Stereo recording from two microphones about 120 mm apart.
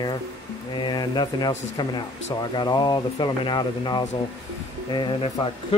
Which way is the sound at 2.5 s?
35° left (ahead or behind).